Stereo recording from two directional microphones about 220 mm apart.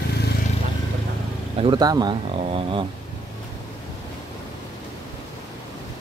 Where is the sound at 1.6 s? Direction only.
20° right (ahead or behind).